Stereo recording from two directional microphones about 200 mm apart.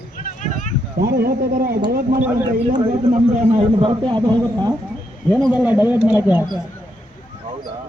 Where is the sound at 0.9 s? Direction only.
50° right (ahead or behind).